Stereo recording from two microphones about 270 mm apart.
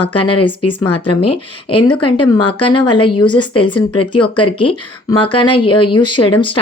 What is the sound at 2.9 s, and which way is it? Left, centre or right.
Speech, left.